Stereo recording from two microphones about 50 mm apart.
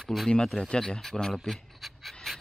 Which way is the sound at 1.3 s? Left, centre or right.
Centre.